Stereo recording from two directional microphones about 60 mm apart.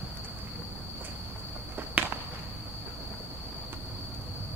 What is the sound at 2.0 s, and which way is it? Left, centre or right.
Walk, right.